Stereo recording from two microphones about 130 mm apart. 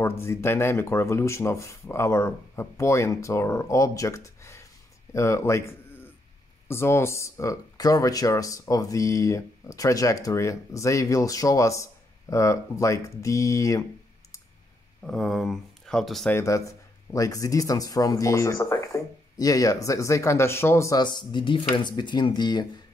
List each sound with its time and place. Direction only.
0.0 s speech: 20° left (ahead or behind)
15.0 s speech: centre (ahead or behind)
16.3 s speech: 20° left (ahead or behind)
21.0 s speech: 35° left (ahead or behind)